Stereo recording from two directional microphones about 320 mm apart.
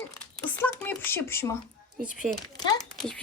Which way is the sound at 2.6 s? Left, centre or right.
Centre.